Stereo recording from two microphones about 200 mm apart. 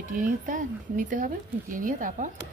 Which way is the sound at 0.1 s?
40° right (ahead or behind).